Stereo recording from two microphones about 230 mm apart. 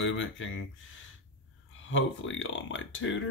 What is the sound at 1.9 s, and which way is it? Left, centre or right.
Speech, left.